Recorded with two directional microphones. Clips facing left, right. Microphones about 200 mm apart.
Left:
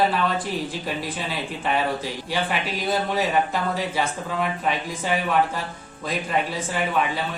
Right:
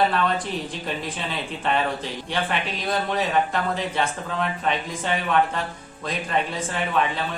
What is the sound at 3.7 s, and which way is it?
Speech, 5° left (ahead or behind).